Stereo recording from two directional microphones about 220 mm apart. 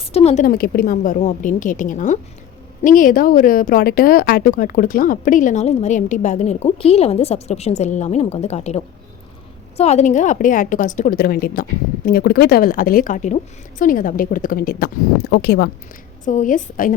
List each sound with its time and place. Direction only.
0.0 s speech: 25° left (ahead or behind); by 15.7 s 50° left (ahead or behind)
16.2 s speech: 35° left (ahead or behind)